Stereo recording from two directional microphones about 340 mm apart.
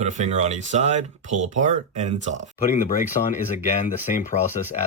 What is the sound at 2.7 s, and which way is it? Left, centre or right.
Speech, left.